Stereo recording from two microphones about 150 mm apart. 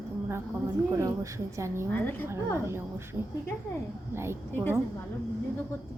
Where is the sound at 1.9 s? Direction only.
15° left (ahead or behind).